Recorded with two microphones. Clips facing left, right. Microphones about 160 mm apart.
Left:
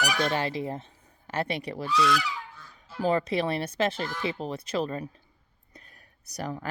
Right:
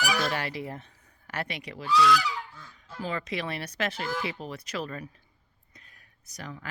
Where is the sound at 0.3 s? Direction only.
25° left (ahead or behind).